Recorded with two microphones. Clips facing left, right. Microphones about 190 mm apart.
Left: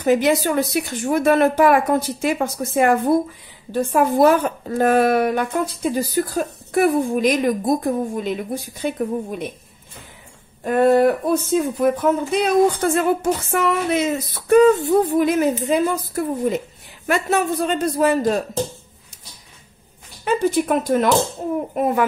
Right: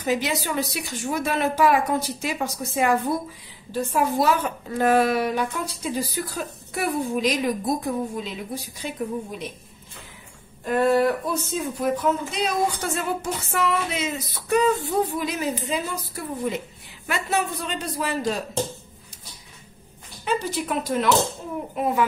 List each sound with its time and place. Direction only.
0.0 s speech: 50° left (ahead or behind)
10.6 s speech: 50° left (ahead or behind)
20.2 s speech: 50° left (ahead or behind)